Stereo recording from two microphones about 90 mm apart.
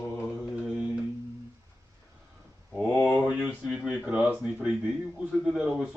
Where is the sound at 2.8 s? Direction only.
15° left (ahead or behind).